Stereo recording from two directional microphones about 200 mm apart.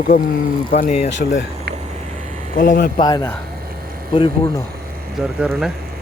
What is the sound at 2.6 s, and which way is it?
Speech, 45° left (ahead or behind).